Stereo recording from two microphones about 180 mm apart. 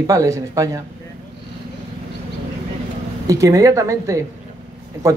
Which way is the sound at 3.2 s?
20° right (ahead or behind).